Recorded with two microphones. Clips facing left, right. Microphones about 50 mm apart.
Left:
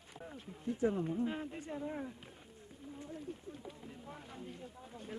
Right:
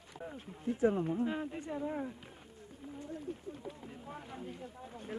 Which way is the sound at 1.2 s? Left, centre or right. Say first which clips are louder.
Right 3 dB; centre.